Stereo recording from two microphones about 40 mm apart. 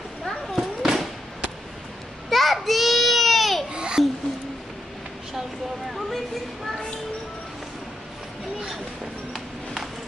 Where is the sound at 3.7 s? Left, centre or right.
Right.